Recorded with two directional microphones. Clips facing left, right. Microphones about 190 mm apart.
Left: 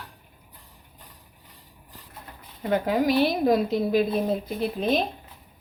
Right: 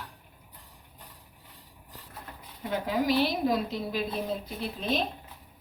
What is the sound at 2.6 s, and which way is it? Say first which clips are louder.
Speech: left 6 dB; 60° left (ahead or behind).